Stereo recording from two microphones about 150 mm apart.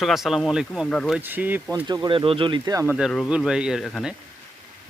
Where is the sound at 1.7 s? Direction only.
30° right (ahead or behind).